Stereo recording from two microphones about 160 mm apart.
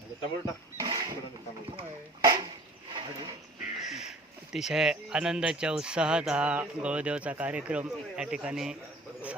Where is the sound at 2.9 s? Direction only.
30° right (ahead or behind).